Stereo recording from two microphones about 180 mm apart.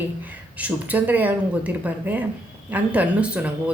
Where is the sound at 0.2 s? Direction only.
10° right (ahead or behind).